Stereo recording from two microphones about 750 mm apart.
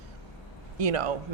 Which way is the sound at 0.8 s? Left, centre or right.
Right.